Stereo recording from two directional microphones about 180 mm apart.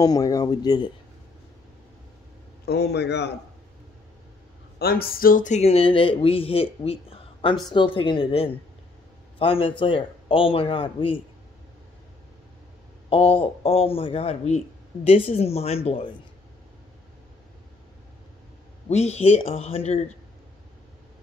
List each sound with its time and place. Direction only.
0.0 s a man's voice: 20° left (ahead or behind)
2.6 s a man's voice: 65° left (ahead or behind)
4.7 s a man's voice: 60° left (ahead or behind); by 11.1 s 30° left (ahead or behind)
13.1 s speech: 30° left (ahead or behind)
18.9 s speech: 40° left (ahead or behind)